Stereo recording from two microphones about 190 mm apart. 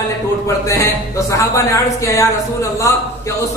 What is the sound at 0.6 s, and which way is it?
A man's voice, 15° left (ahead or behind).